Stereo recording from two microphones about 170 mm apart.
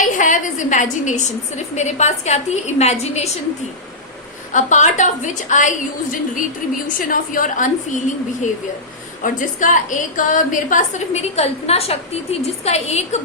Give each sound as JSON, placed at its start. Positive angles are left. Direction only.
{"t": 0.0, "sound": "a sound", "side_deg": 50}
{"t": 1.7, "sound": "a woman's voice", "side_deg": 40}
{"t": 4.5, "sound": "a woman's voice", "side_deg": 45}